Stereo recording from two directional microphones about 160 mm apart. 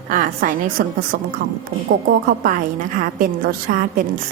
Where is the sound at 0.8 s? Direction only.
70° right (ahead or behind).